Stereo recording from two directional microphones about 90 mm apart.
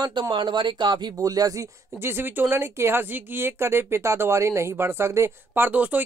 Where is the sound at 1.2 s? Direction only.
40° right (ahead or behind).